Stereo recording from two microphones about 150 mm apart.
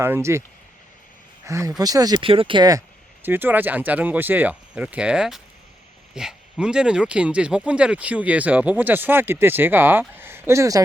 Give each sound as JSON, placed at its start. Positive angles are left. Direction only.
{"t": 0.0, "sound": "speech", "side_deg": -15}
{"t": 1.5, "sound": "speech", "side_deg": -20}
{"t": 3.2, "sound": "speech", "side_deg": -15}